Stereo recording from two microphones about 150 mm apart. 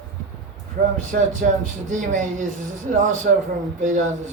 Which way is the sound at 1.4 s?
85° right.